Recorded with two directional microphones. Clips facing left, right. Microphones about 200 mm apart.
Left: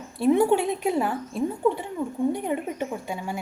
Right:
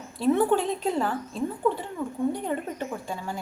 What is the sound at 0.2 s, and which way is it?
A woman's voice, 10° left (ahead or behind).